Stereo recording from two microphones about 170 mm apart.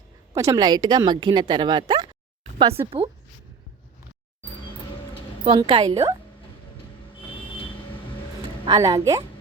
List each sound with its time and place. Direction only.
0.3 s speech: 20° right (ahead or behind)
5.5 s speech: 30° right (ahead or behind)
8.6 s speech: 25° right (ahead or behind)